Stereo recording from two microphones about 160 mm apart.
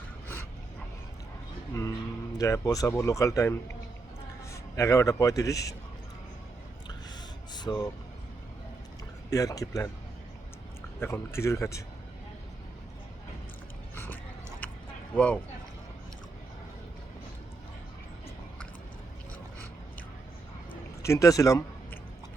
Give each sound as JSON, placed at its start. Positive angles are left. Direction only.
{"t": 1.7, "sound": "music", "side_deg": 20}
{"t": 2.4, "sound": "a man's voice", "side_deg": 20}
{"t": 7.5, "sound": "vehicle", "side_deg": 25}
{"t": 9.3, "sound": "speech", "side_deg": 20}
{"t": 11.0, "sound": "a man's voice", "side_deg": 15}
{"t": 13.9, "sound": "dog", "side_deg": 15}
{"t": 14.6, "sound": "a sound", "side_deg": 10}
{"t": 15.1, "sound": "speech", "side_deg": 5}
{"t": 21.0, "sound": "speech", "side_deg": 20}